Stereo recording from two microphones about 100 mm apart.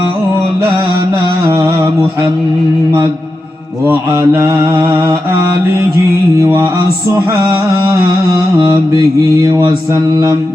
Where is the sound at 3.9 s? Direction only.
25° right (ahead or behind).